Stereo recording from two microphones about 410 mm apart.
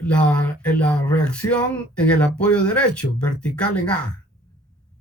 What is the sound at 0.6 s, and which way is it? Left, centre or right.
Speech, centre.